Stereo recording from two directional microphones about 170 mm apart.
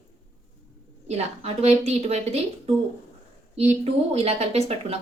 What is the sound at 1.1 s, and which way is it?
Speech, 40° right (ahead or behind).